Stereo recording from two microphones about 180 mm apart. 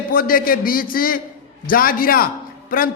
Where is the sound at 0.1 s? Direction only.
50° left (ahead or behind).